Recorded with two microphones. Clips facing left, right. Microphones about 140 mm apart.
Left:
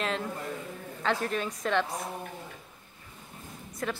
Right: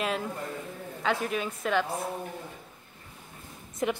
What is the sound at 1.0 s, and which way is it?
Speech, 5° right (ahead or behind).